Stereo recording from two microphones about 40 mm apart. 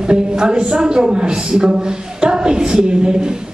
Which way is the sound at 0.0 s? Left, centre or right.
Right.